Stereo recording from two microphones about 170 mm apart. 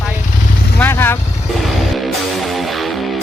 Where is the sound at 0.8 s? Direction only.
15° left (ahead or behind).